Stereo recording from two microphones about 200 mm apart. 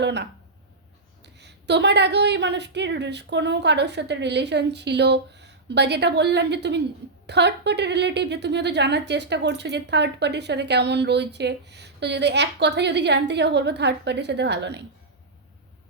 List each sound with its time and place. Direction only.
0.0 s a woman's voice: 60° right (ahead or behind)